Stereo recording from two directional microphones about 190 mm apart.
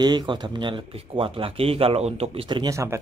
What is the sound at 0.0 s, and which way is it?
Speech, 25° right (ahead or behind).